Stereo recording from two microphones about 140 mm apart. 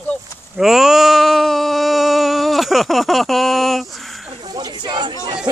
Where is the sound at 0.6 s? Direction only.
5° right (ahead or behind).